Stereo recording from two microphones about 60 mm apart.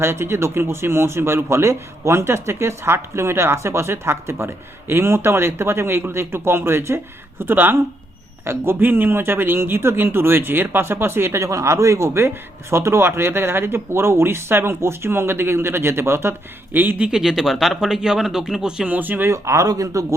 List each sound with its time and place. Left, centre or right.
0.0 s speech: right
8.5 s speech: right
8.8 s speech: right
16.7 s speech: right
17.0 s speech: centre
18.9 s speech: right
19.3 s speech: right